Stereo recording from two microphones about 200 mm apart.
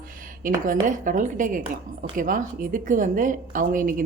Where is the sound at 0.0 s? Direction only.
45° right (ahead or behind).